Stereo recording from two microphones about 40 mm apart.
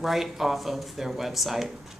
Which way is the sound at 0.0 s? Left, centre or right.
Centre.